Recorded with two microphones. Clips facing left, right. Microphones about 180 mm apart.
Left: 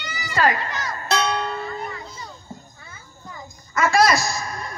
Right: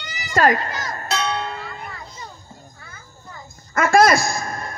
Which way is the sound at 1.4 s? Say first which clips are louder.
Left 2 dB; 45° left (ahead or behind).